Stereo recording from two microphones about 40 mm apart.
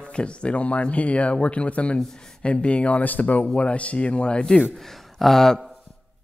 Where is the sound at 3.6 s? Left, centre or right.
Left.